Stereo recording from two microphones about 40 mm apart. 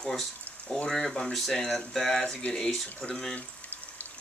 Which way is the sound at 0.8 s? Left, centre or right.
Centre.